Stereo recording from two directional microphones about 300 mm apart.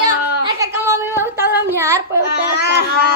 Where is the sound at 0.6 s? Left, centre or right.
Centre.